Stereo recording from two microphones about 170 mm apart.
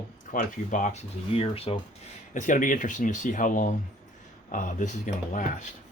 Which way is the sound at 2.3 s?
50° left (ahead or behind).